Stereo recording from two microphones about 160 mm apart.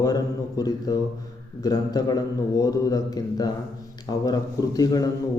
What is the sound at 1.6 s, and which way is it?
A man's voice, 25° left (ahead or behind).